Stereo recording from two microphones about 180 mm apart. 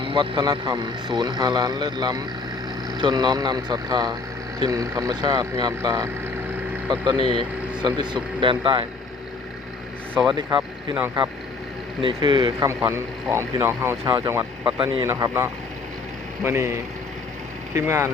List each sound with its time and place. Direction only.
0.0 s speech: 25° right (ahead or behind)
10.2 s speech: 25° right (ahead or behind)
12.0 s speech: 25° right (ahead or behind)
12.6 s speech: 15° right (ahead or behind)
17.7 s speech: 15° right (ahead or behind)